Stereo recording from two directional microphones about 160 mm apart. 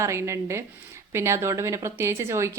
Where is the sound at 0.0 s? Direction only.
20° right (ahead or behind).